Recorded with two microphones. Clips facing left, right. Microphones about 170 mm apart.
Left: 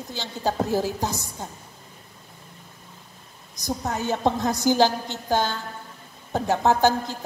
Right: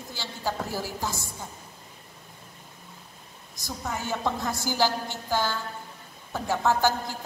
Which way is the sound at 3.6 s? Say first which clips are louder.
Left 6 dB; 20° left (ahead or behind).